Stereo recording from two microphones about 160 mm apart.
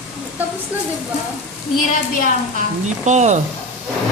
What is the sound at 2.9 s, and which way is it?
Speech, 50° right (ahead or behind).